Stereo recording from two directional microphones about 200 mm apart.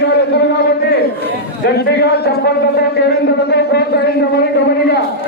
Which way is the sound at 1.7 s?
55° left (ahead or behind).